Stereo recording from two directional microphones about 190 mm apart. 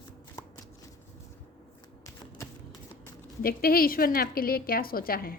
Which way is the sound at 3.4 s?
50° left (ahead or behind).